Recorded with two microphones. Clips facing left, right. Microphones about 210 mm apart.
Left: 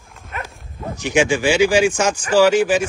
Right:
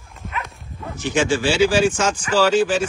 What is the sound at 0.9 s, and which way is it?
Speech, 15° left (ahead or behind).